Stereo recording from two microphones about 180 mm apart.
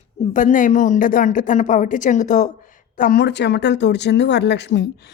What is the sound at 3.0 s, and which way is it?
Speech, 60° left (ahead or behind).